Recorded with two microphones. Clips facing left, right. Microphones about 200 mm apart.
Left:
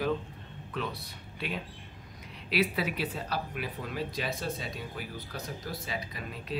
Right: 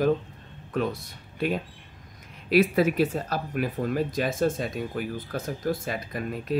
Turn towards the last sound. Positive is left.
turn(degrees=-50)  # may be behind; listen again after turning